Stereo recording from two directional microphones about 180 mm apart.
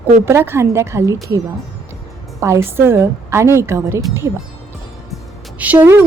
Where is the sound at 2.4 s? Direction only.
15° right (ahead or behind).